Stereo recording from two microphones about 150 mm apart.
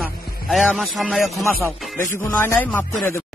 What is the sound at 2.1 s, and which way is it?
Speech, 15° left (ahead or behind).